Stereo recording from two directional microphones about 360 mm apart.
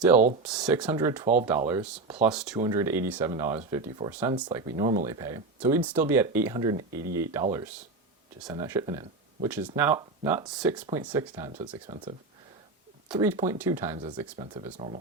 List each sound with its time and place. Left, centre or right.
0.4 s speech: centre
13.1 s speech: centre